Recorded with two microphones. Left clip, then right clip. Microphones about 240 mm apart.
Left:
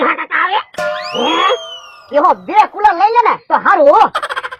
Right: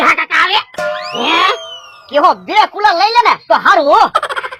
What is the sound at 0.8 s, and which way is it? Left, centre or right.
Music, centre.